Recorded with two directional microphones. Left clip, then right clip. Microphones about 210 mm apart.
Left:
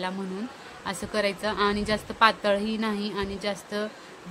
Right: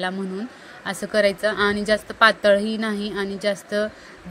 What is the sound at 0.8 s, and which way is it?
Speech, 15° right (ahead or behind).